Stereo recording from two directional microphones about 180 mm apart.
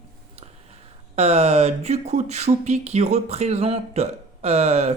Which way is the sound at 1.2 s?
35° right (ahead or behind).